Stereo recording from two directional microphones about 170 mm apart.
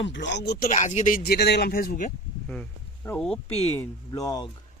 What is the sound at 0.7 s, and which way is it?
Speech, 45° left (ahead or behind).